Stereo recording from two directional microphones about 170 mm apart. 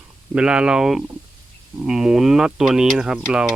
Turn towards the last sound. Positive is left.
turn(degrees=-5)  # may be behind; listen again after turning